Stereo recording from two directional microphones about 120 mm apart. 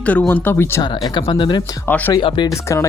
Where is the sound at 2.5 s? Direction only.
25° left (ahead or behind).